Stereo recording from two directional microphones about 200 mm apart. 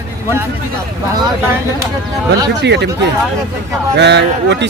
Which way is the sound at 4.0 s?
60° right (ahead or behind).